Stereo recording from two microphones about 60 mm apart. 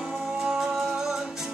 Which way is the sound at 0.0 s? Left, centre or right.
Centre.